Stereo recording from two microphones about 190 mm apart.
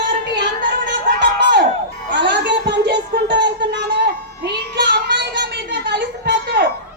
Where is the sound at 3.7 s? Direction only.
65° right (ahead or behind).